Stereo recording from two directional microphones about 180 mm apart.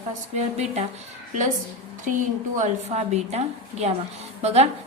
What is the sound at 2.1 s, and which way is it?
A woman's voice, 45° right (ahead or behind).